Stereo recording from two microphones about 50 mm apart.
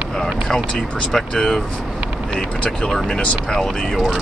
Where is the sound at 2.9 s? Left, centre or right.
Centre.